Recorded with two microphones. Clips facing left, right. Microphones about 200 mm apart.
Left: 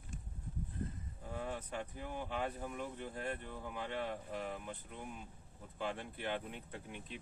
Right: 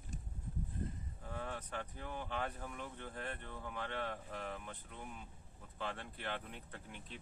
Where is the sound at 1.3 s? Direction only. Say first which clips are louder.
Left 2 dB; 15° left (ahead or behind).